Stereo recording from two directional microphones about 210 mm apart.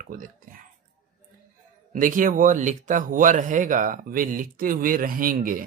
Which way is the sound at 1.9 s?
40° right (ahead or behind).